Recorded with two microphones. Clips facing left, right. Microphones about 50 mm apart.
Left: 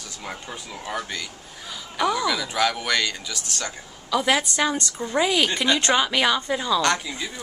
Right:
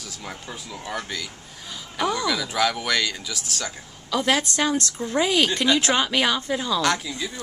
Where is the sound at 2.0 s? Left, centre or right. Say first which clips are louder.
Left 1 dB; centre.